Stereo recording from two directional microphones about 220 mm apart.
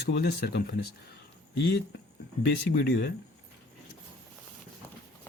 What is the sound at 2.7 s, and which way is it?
Speech, 45° left (ahead or behind).